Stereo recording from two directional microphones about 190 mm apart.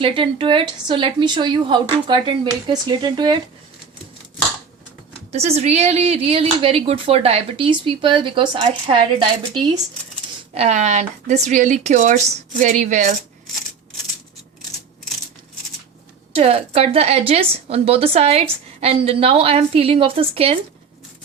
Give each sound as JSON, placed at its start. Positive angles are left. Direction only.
{"t": 0.0, "sound": "speech", "side_deg": -30}
{"t": 5.3, "sound": "speech", "side_deg": -35}
{"t": 10.5, "sound": "a woman's voice", "side_deg": -35}
{"t": 16.3, "sound": "a woman's voice", "side_deg": -30}